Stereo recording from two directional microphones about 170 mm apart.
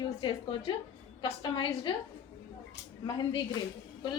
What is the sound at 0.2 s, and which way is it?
A woman's voice, 30° left (ahead or behind).